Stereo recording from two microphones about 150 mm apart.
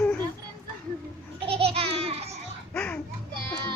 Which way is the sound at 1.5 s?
40° right (ahead or behind).